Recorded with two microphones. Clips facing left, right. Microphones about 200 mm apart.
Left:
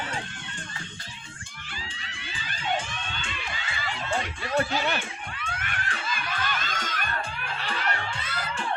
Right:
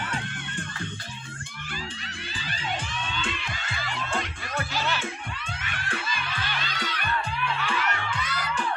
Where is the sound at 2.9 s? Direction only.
50° left (ahead or behind).